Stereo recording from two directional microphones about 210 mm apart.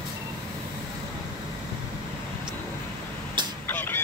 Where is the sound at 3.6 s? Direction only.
10° left (ahead or behind).